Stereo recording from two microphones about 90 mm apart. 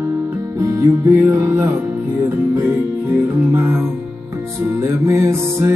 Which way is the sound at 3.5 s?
25° right (ahead or behind).